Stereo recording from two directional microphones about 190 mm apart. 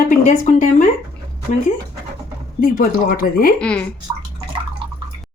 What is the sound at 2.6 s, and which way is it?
Speech, 45° left (ahead or behind).